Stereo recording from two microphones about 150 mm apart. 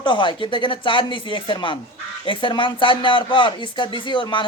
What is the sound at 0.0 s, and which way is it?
Speech, 30° left (ahead or behind).